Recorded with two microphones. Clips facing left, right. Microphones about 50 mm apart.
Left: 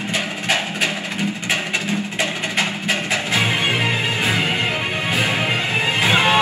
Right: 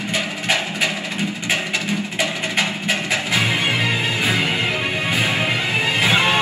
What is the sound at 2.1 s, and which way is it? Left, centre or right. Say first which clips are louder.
Music: right 1 dB; left.